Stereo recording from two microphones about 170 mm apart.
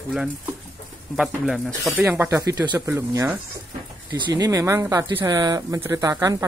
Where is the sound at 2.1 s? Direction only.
15° right (ahead or behind).